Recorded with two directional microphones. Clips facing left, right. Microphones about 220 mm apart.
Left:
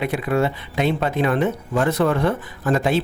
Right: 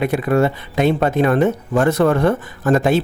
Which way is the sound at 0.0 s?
45° right (ahead or behind).